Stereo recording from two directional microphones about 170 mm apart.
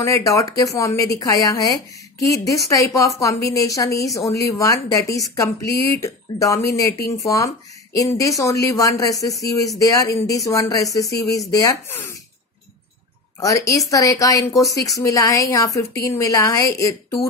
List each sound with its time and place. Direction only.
0.0 s a woman's voice: 20° left (ahead or behind)
13.4 s a woman's voice: 20° left (ahead or behind)